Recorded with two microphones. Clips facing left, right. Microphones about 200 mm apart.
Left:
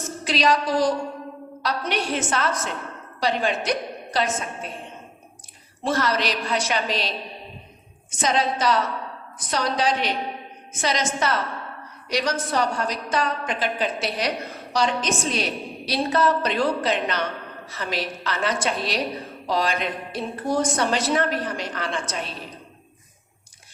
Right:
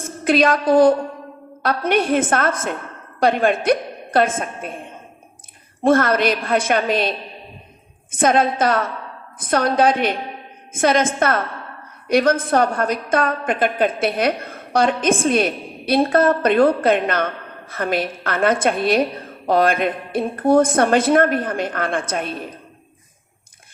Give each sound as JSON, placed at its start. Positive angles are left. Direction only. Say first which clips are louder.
{"t": 0.0, "sound": "a woman's voice", "louder": "right 7 dB", "side_deg": -55}
{"t": 8.1, "sound": "a woman's voice", "louder": "right 6 dB", "side_deg": -55}